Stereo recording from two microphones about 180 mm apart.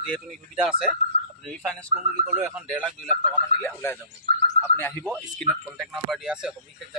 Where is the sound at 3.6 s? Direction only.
10° left (ahead or behind).